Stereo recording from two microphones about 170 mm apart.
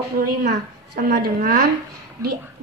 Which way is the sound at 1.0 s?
60° right (ahead or behind).